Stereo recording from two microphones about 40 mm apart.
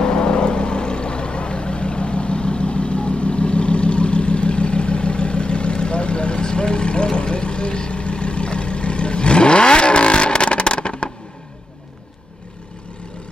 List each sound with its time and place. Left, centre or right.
0.0 s vehicle: left